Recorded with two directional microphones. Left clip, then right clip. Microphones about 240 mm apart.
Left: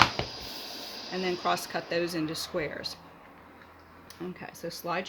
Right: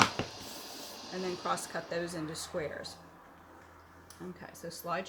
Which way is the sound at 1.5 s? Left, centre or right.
Left.